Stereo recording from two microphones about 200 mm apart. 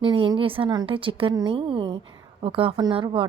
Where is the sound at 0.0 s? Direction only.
25° right (ahead or behind).